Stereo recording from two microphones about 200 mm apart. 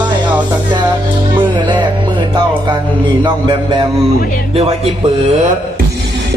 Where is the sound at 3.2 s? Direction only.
25° right (ahead or behind).